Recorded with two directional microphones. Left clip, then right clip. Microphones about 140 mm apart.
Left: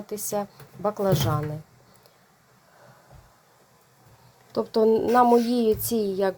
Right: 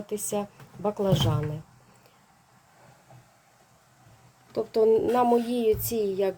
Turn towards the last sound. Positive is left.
turn(degrees=15)  # may be behind; listen again after turning